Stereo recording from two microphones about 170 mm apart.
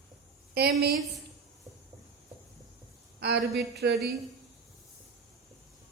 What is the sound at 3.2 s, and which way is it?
Speech, 75° right (ahead or behind).